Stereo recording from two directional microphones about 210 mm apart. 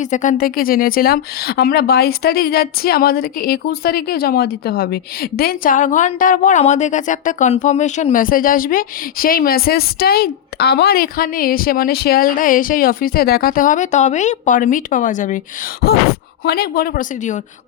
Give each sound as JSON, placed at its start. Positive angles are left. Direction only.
{"t": 0.0, "sound": "a woman's voice", "side_deg": 35}
{"t": 16.4, "sound": "a woman's voice", "side_deg": 50}